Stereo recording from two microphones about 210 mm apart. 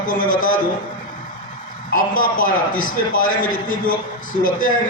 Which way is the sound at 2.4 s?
40° left (ahead or behind).